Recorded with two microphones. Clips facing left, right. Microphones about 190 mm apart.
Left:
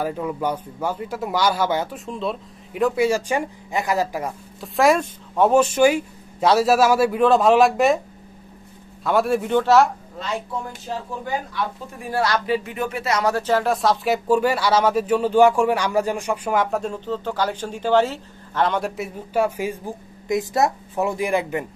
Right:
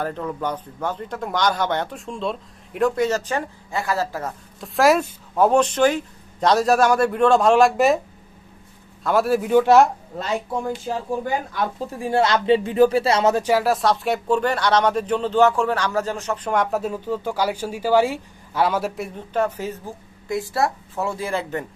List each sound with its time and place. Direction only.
0.0 s speech: 10° left (ahead or behind)
4.6 s speech: centre (ahead or behind)
9.0 s speech: centre (ahead or behind)
12.0 s speech: 25° right (ahead or behind)
13.4 s speech: 10° right (ahead or behind); by 16.5 s 10° left (ahead or behind)
16.5 s speech: 5° right (ahead or behind); by 21.6 s 15° left (ahead or behind)